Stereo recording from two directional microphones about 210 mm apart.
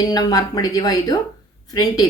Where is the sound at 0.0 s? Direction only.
20° left (ahead or behind).